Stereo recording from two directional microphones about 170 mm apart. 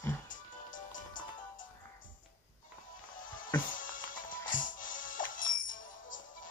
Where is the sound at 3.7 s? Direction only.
50° left (ahead or behind).